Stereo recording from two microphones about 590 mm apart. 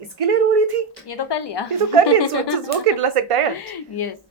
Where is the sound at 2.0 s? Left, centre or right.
Right.